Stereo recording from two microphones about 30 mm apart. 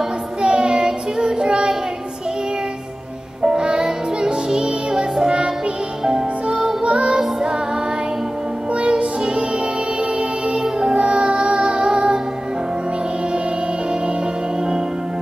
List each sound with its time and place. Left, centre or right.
0.4 s child singing: right
3.4 s music: right
6.4 s music: right
8.7 s music: right